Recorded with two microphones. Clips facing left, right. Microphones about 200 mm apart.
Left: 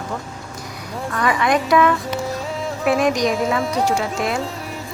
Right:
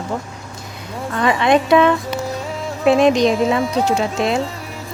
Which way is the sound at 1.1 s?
25° right (ahead or behind).